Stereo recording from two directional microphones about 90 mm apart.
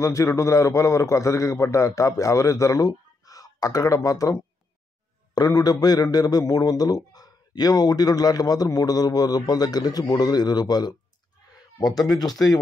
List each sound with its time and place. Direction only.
0.0 s a man's voice: 35° left (ahead or behind)